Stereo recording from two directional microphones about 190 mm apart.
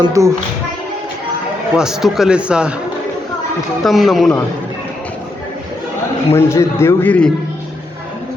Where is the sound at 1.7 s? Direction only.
5° right (ahead or behind).